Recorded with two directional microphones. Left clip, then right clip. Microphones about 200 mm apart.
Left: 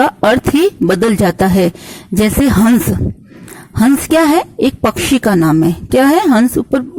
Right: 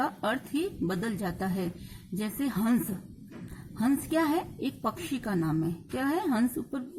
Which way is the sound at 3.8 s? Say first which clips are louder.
Left 17 dB; 45° left (ahead or behind).